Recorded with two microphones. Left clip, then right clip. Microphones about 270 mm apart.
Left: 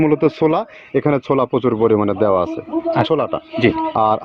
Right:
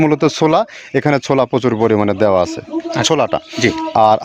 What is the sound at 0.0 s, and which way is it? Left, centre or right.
A man's voice, right.